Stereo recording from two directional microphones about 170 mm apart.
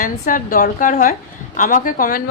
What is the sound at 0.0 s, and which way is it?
A woman's voice, 55° left (ahead or behind).